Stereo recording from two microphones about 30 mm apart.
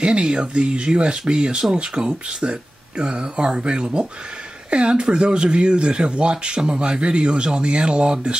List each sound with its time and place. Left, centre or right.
0.0 s speech: right
3.0 s speech: right